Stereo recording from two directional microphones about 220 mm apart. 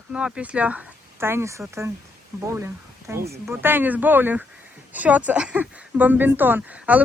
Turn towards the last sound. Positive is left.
turn(degrees=-5)  # may be behind; listen again after turning